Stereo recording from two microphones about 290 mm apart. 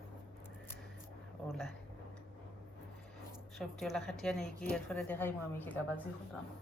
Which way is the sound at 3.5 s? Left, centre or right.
Centre.